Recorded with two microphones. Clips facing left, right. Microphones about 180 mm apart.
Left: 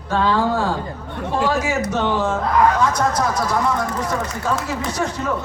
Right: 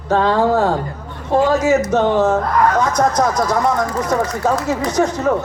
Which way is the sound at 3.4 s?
45° right (ahead or behind).